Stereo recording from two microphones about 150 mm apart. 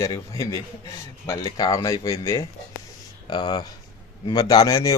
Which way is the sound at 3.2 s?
30° left (ahead or behind).